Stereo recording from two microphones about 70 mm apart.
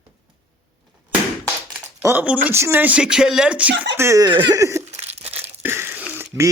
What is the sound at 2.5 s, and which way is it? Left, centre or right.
Speech, right.